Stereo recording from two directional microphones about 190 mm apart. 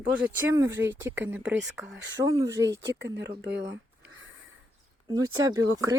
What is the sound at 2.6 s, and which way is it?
Speech, 65° right (ahead or behind).